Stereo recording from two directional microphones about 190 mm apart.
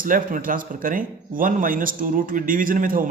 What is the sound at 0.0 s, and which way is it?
Speech, 45° right (ahead or behind).